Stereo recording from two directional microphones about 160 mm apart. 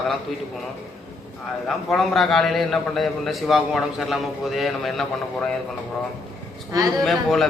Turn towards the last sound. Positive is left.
turn(degrees=0)  # may be behind; listen again after turning